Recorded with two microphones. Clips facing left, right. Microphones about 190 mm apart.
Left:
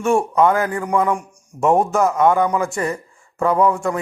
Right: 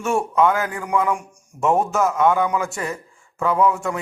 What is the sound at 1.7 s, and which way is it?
Speech, centre (ahead or behind).